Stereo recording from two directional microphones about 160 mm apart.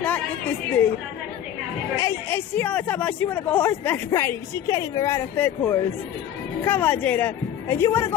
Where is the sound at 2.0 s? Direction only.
10° left (ahead or behind).